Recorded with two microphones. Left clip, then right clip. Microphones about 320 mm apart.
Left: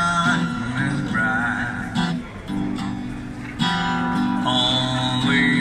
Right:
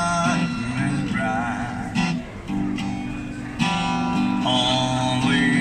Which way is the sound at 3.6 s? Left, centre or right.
Centre.